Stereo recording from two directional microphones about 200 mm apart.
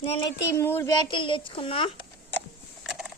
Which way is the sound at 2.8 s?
Centre (ahead or behind).